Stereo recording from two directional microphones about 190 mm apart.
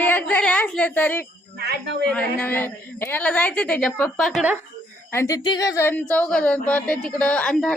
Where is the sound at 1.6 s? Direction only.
60° right (ahead or behind).